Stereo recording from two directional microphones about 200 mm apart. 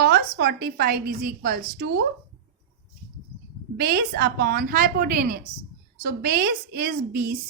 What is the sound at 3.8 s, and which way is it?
A woman's voice, 50° right (ahead or behind).